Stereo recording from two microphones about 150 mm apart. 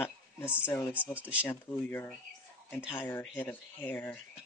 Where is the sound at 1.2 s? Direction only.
10° right (ahead or behind).